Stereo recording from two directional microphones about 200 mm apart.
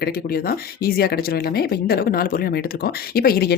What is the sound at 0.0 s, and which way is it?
Speech, 50° left (ahead or behind).